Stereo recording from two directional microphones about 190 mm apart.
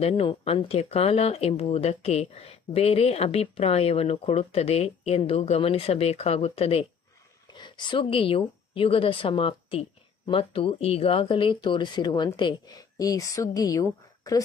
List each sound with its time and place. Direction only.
0.0 s a woman's voice: 30° left (ahead or behind)